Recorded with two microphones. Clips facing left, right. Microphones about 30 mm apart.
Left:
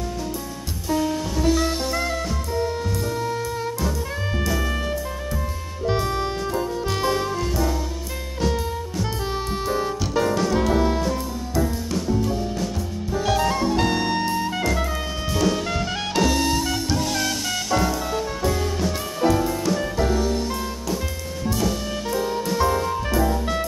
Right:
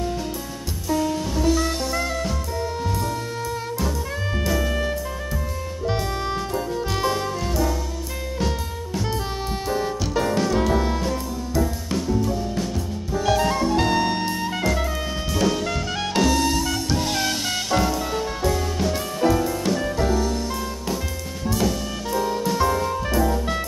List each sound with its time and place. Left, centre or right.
1.5 s jazz: centre
4.5 s music: centre
5.9 s music: centre
9.7 s music: centre
13.2 s jazz: centre
15.3 s music: centre
17.0 s music: right
18.4 s music: centre
22.1 s music: centre